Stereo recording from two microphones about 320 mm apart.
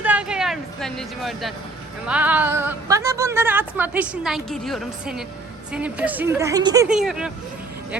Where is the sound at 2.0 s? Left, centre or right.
Centre.